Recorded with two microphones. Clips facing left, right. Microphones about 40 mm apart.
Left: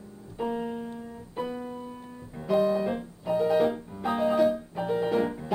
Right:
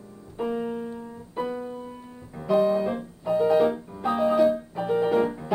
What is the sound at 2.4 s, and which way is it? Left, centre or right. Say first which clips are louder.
Music: right 3 dB; centre.